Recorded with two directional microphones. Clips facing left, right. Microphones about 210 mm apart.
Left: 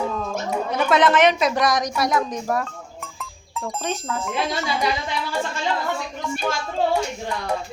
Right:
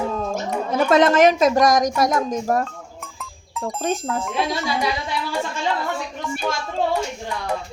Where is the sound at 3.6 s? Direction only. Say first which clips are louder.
Right 4 dB; 40° right (ahead or behind).